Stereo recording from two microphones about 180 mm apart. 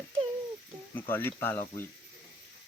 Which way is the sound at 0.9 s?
10° left (ahead or behind).